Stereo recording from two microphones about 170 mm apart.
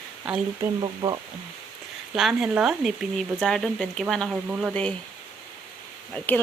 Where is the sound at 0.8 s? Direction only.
25° right (ahead or behind).